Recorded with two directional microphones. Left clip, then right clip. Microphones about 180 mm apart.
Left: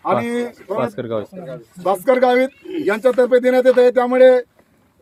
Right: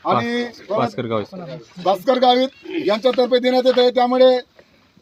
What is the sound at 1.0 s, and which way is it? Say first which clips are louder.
Speech: right 1 dB; 45° right (ahead or behind).